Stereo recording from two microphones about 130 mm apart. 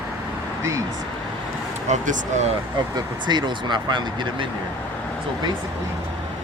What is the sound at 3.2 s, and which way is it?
Speech, 35° right (ahead or behind).